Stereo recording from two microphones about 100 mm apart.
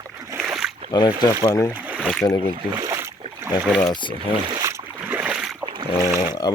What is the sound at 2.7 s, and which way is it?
Boat, 40° right (ahead or behind).